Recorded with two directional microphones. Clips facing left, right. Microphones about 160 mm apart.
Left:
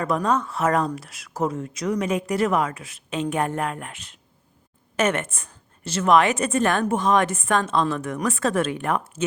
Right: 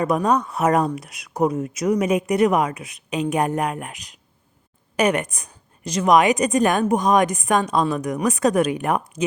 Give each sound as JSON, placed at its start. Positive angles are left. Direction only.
{"t": 0.0, "sound": "a woman's voice", "side_deg": -20}
{"t": 4.9, "sound": "a woman's voice", "side_deg": -15}